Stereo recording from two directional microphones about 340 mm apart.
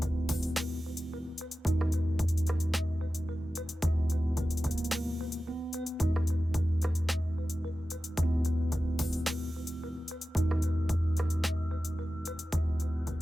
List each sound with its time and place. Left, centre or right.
0.0 s music: centre
4.4 s music: centre